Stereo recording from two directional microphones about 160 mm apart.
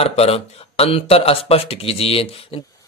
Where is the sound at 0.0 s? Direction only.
40° left (ahead or behind).